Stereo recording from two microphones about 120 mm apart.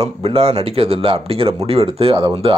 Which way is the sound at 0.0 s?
55° right (ahead or behind).